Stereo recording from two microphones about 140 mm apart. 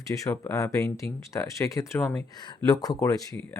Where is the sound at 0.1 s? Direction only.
20° left (ahead or behind).